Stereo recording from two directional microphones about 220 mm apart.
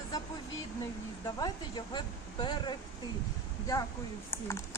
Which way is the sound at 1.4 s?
20° left (ahead or behind).